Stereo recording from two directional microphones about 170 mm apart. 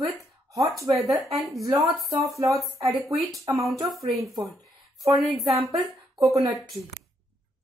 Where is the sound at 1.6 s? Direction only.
20° right (ahead or behind).